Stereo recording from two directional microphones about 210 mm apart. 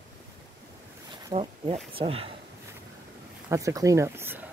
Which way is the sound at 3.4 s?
15° right (ahead or behind).